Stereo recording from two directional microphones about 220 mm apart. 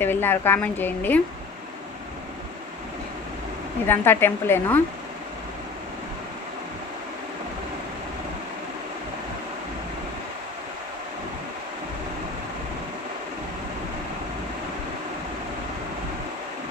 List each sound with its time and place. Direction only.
0.0 s a woman's voice: 10° left (ahead or behind)
3.8 s a woman's voice: 10° left (ahead or behind)